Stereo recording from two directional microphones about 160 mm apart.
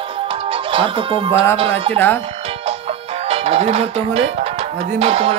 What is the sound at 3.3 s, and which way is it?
Speech, 40° right (ahead or behind).